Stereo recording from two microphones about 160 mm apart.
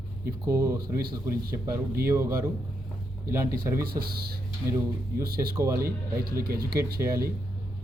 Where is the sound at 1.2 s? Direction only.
20° right (ahead or behind).